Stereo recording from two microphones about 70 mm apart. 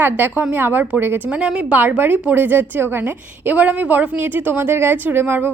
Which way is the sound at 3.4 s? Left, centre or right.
Centre.